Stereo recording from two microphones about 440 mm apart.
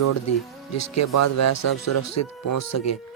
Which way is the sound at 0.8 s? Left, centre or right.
Left.